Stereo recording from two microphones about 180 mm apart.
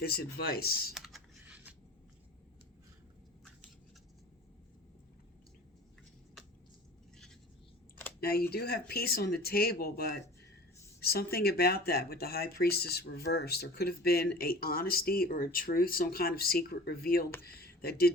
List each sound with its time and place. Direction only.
0.0 s speech: 60° left (ahead or behind)
0.9 s computer keyboard: 5° right (ahead or behind)
8.2 s speech: 60° left (ahead or behind)